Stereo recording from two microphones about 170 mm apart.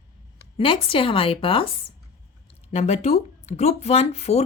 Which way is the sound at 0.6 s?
30° left (ahead or behind).